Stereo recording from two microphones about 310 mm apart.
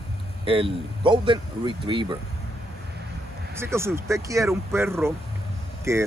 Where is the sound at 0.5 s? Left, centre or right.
Centre.